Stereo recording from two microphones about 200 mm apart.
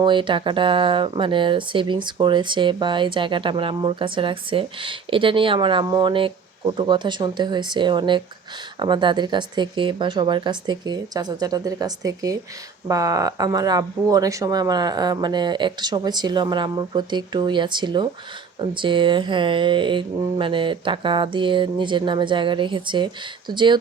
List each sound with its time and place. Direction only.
0.0 s speech: 25° right (ahead or behind)